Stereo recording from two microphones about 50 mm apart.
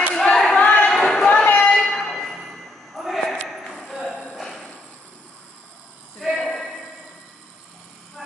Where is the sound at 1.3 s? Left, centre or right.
Left.